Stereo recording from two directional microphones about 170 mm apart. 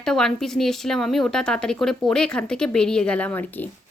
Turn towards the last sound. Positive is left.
turn(degrees=10)  # may be behind; listen again after turning